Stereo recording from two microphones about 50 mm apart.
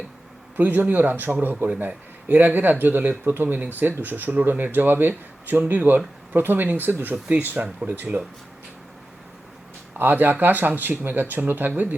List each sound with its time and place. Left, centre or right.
0.5 s speech: right
10.0 s speech: right